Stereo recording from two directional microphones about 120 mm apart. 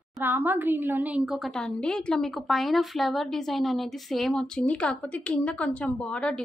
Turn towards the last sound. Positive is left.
turn(degrees=10)  # may be behind; listen again after turning